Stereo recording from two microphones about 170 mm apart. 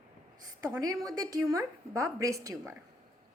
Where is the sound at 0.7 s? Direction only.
20° right (ahead or behind).